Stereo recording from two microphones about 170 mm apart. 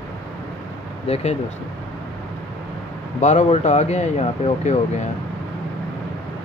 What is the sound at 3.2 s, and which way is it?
Speech, 45° left (ahead or behind).